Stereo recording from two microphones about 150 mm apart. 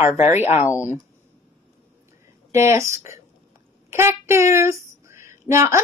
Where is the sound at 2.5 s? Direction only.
20° right (ahead or behind).